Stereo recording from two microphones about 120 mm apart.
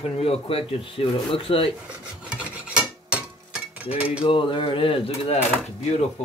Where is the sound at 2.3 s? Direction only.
10° right (ahead or behind).